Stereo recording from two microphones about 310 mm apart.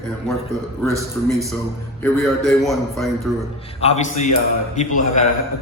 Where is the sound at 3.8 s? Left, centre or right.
Left.